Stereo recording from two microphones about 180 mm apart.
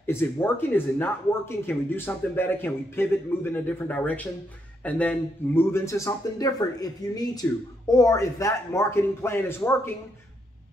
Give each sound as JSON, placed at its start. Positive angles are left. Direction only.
{"t": 0.0, "sound": "speech", "side_deg": 15}